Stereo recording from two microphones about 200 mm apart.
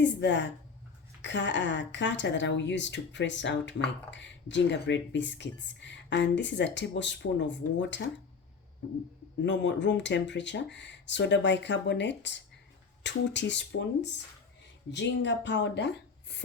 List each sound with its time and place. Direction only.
0.0 s speech: 60° left (ahead or behind)
9.4 s speech: 60° left (ahead or behind)